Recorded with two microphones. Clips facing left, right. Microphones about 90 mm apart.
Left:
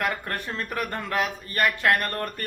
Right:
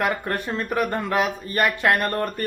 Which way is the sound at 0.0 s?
15° right (ahead or behind).